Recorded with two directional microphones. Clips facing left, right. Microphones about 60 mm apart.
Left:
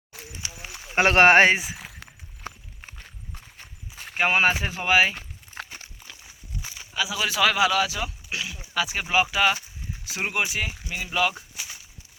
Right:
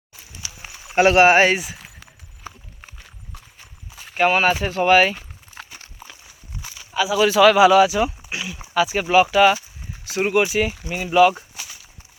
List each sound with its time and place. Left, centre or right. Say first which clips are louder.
0.4 s a sound: right 1 dB; left
0.9 s speech: right 3 dB; left
1.5 s speech: right 1 dB; left
2.5 s clip-clop: even; left
3.0 s walk: right 1 dB; left
4.1 s speech: right 4 dB; centre
4.8 s speech: right 6 dB; centre
5.1 s a sound: even; left
6.5 s walk: right 1 dB; centre
6.9 s speech: right 9 dB; centre
7.8 s speech: right 10 dB; centre
8.4 s speech: right 9 dB; centre
11.6 s a sound: right 1 dB; centre